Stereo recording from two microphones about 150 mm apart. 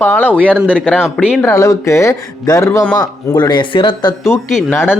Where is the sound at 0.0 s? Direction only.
10° left (ahead or behind).